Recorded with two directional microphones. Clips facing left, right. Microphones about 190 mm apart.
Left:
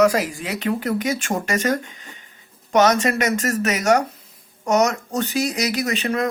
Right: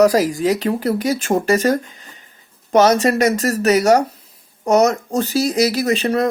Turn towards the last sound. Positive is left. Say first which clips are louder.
# right 5 dB
turn(degrees=-35)  # may be behind; listen again after turning